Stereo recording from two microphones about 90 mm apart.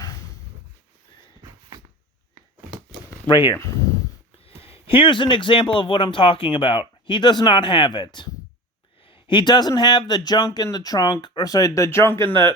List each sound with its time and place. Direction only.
3.2 s speech: 60° left (ahead or behind)
4.4 s speech: 90° left; by 8.3 s 60° left (ahead or behind)
9.0 s speech: 75° left (ahead or behind); by 12.5 s 30° left (ahead or behind)